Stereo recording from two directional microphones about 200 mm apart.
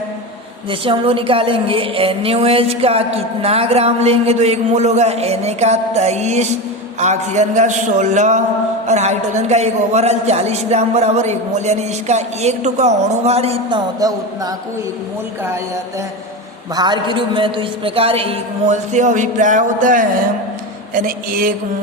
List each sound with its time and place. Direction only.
0.7 s a woman's voice: 25° right (ahead or behind)
16.7 s a man's voice: 20° right (ahead or behind); by 21.5 s 45° right (ahead or behind)